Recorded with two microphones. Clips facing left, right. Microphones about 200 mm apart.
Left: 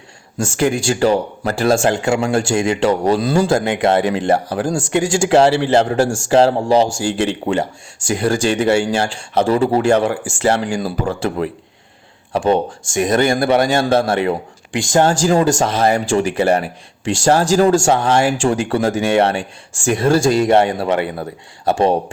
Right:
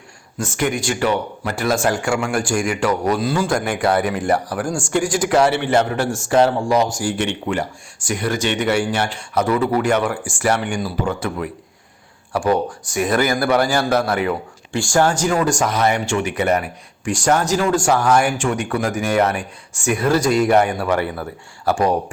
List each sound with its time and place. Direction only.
0.3 s speech: 30° left (ahead or behind)